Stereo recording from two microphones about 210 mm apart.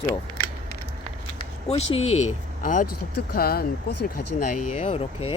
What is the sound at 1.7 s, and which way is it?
Speech, 30° left (ahead or behind).